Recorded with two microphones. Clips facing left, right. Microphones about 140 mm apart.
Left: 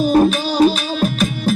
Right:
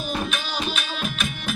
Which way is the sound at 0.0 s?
40° left (ahead or behind).